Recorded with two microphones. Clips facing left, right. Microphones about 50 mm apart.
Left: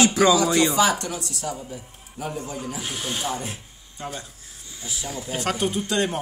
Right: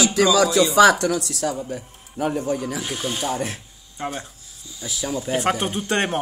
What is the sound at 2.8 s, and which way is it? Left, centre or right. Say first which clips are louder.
Speech: right 3 dB; centre.